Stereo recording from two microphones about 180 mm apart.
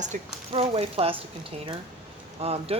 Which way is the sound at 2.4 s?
35° right (ahead or behind).